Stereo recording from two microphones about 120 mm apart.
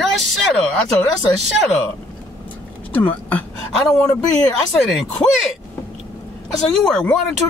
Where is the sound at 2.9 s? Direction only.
15° left (ahead or behind).